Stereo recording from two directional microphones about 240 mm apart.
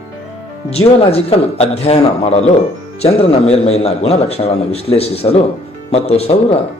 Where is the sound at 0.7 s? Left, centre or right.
Left.